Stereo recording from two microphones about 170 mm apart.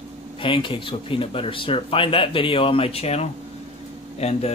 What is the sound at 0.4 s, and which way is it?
Speech, 30° left (ahead or behind).